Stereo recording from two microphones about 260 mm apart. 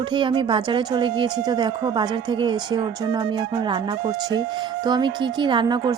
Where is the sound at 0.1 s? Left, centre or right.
Centre.